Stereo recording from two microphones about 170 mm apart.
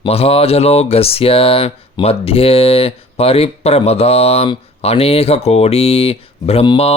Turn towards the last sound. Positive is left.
turn(degrees=30)  # may be behind; listen again after turning